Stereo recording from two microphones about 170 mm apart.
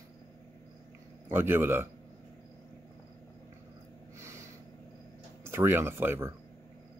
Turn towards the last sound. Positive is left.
turn(degrees=-15)  # may be behind; listen again after turning